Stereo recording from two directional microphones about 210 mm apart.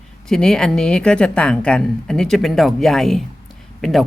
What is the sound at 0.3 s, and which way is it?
A woman's voice, centre (ahead or behind).